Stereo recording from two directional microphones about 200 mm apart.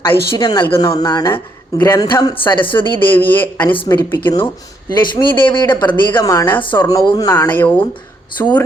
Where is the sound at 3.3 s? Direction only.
10° left (ahead or behind).